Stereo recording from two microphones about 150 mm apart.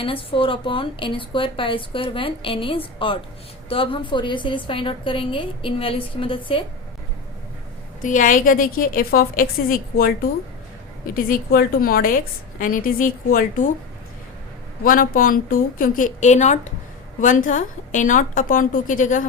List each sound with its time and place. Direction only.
0.0 s a woman's voice: 35° left (ahead or behind)
8.0 s a woman's voice: 60° left (ahead or behind)
14.8 s a woman's voice: 70° left (ahead or behind)